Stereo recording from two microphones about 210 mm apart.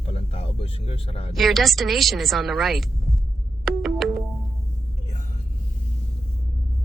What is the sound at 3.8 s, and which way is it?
Music, centre (ahead or behind).